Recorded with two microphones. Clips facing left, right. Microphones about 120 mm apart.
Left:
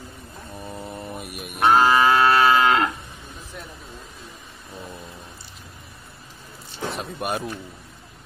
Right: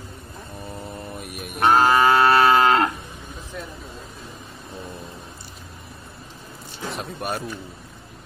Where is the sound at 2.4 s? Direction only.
45° right (ahead or behind).